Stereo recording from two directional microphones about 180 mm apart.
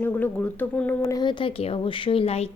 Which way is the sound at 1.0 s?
20° left (ahead or behind).